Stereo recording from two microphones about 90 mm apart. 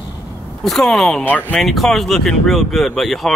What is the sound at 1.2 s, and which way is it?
Speech, 15° left (ahead or behind).